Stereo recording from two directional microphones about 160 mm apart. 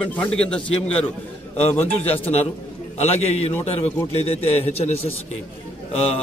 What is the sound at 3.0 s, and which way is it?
A man's voice, 40° left (ahead or behind).